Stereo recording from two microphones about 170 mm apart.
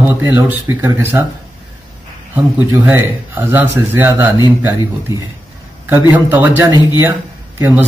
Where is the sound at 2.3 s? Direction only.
10° right (ahead or behind).